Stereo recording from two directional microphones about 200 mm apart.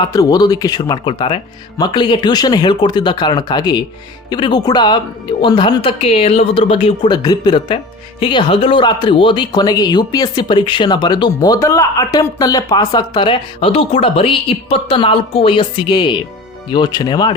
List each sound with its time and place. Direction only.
0.0 s speech: 20° left (ahead or behind)